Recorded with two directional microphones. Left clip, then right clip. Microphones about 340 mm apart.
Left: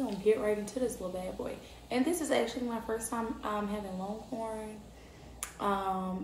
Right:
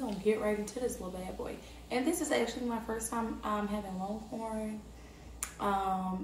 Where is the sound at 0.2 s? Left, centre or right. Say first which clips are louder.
Left 2 dB; centre.